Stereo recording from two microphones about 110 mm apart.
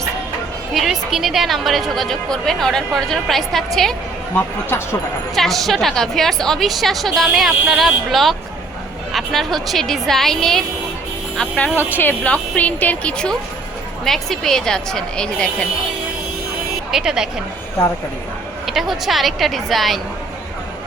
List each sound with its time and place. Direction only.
0.7 s a woman's voice: centre (ahead or behind)
4.4 s speech: 20° left (ahead or behind)
5.3 s a woman's voice: centre (ahead or behind)
16.9 s a woman's voice: 5° right (ahead or behind)
18.6 s a woman's voice: centre (ahead or behind)